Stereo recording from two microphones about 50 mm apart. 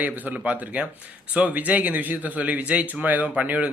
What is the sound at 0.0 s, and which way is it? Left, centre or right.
Speech, right.